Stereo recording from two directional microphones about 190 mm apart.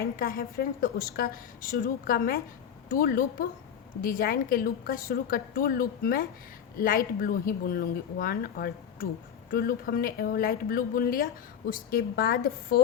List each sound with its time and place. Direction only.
0.0 s a woman's voice: 50° left (ahead or behind)